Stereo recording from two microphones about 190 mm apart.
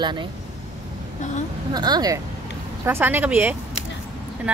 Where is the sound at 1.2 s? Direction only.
40° left (ahead or behind).